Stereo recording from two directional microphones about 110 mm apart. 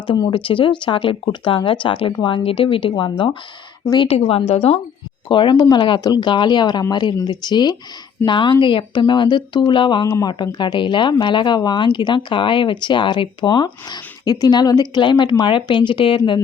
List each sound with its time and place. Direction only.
0.3 s speech: 50° left (ahead or behind)
4.1 s a woman's voice: 60° left (ahead or behind)
5.3 s speech: 45° left (ahead or behind)